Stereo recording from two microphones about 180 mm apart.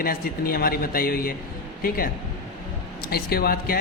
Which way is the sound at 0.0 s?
55° left (ahead or behind).